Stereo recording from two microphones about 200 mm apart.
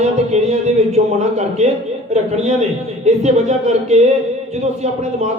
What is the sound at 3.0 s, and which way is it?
Speech, 35° right (ahead or behind).